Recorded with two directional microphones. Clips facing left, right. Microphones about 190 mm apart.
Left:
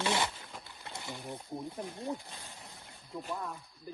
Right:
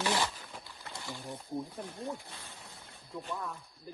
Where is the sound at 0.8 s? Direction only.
20° left (ahead or behind).